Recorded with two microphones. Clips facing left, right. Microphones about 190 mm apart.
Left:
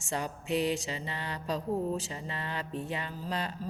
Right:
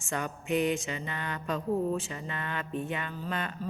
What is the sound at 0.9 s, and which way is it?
A woman's voice, 30° left (ahead or behind).